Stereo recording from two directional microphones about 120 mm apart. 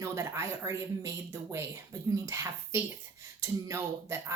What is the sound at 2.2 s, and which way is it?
Speech, 25° right (ahead or behind).